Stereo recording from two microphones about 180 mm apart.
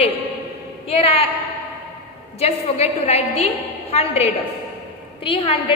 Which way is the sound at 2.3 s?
35° left (ahead or behind).